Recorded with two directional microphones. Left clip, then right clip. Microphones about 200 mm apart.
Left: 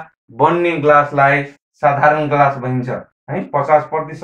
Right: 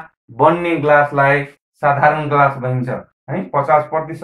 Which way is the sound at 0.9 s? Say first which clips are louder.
Right 1 dB; 10° right (ahead or behind).